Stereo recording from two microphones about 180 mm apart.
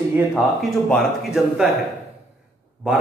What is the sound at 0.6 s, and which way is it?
A man's voice, centre (ahead or behind).